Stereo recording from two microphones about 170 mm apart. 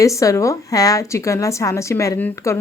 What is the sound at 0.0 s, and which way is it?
A woman's voice, 20° left (ahead or behind).